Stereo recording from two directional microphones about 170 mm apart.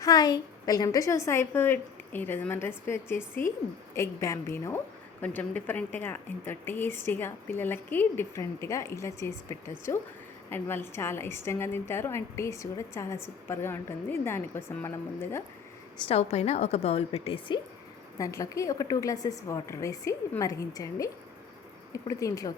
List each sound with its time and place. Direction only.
0.0 s a woman's voice: 20° left (ahead or behind)
16.0 s a woman's voice: 35° left (ahead or behind)
18.2 s a woman's voice: 20° left (ahead or behind)